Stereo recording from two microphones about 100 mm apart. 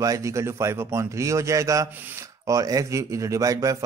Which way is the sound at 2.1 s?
30° right (ahead or behind).